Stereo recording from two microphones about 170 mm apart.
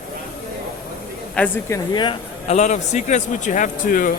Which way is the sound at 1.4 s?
5° left (ahead or behind).